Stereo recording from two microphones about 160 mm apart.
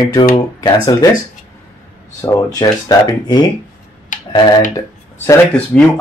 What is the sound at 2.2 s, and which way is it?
Speech, 25° left (ahead or behind).